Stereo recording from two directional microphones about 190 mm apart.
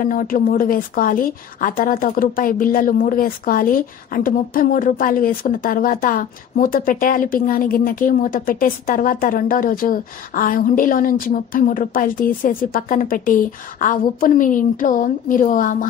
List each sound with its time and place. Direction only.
0.0 s a woman's voice: 45° left (ahead or behind)